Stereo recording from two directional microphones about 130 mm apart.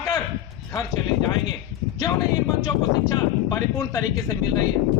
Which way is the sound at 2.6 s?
25° left (ahead or behind).